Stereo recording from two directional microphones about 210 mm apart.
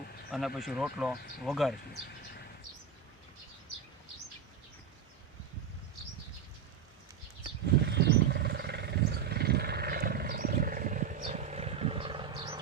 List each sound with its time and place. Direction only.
0.3 s speech: centre (ahead or behind)
7.9 s wild animals: 55° right (ahead or behind); by 12.5 s 25° right (ahead or behind)